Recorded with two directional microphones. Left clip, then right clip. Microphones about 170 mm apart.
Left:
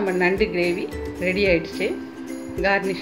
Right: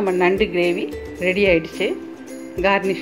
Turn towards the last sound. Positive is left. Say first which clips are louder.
# right 3 dB
turn(degrees=-40)  # may be behind; listen again after turning